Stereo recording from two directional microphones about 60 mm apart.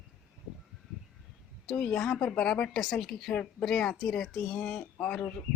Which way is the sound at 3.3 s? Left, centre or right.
Centre.